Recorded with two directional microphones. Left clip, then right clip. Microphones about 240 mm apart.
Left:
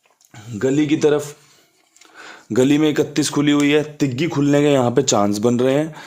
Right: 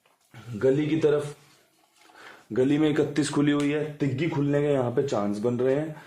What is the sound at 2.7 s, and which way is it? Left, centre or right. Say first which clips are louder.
Speech: left 6 dB; left.